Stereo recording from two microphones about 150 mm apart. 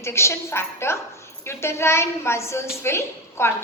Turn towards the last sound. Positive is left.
turn(degrees=15)  # may be behind; listen again after turning